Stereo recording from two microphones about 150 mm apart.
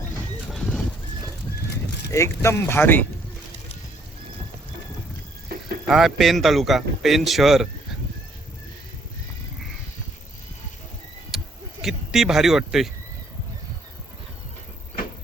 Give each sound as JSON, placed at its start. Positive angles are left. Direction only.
{"t": 0.5, "sound": "horse", "side_deg": 0}
{"t": 2.0, "sound": "speech", "side_deg": 20}
{"t": 5.9, "sound": "speech", "side_deg": 0}
{"t": 11.3, "sound": "a sound", "side_deg": 0}
{"t": 11.8, "sound": "speech", "side_deg": -5}